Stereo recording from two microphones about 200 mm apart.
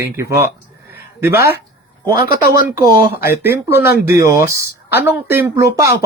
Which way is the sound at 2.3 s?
45° left (ahead or behind).